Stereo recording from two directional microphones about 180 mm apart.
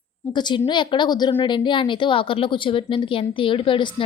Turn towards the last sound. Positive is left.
turn(degrees=30)  # may be behind; listen again after turning